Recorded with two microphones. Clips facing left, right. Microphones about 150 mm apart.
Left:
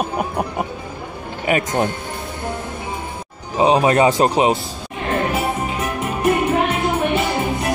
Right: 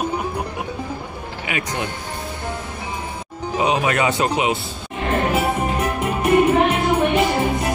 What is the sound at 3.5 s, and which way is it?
Speech, 30° left (ahead or behind).